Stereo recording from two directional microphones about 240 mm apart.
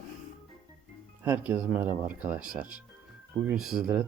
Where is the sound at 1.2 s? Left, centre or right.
Centre.